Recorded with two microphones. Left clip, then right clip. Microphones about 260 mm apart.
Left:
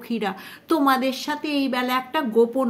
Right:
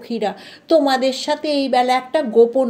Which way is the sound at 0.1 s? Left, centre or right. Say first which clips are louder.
Right 5 dB; centre.